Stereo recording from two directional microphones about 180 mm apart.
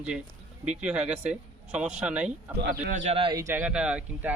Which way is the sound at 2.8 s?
45° right (ahead or behind).